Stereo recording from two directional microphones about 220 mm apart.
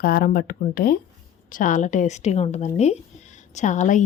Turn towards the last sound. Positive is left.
turn(degrees=35)  # may be behind; listen again after turning